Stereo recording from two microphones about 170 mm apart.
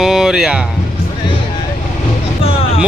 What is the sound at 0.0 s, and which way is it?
Speech, centre (ahead or behind).